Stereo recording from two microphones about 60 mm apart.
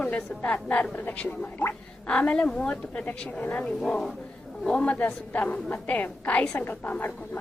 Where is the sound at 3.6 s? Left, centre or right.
Centre.